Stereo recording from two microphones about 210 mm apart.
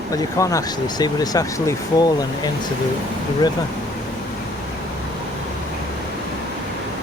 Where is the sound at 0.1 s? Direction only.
15° left (ahead or behind).